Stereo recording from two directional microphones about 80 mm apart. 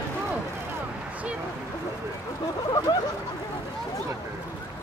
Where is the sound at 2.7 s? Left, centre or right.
Left.